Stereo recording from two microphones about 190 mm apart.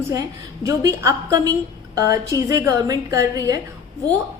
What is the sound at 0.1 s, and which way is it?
A woman's voice, 20° right (ahead or behind).